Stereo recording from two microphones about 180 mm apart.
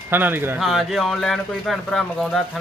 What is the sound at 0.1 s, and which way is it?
Speech, 10° right (ahead or behind).